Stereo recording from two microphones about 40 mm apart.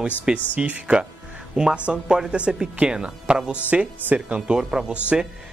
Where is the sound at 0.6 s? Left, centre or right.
Right.